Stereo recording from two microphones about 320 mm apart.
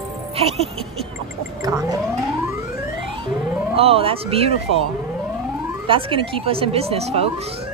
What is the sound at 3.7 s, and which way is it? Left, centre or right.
Speech, centre.